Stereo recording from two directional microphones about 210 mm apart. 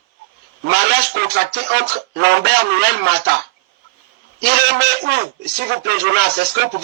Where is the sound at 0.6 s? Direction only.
50° right (ahead or behind).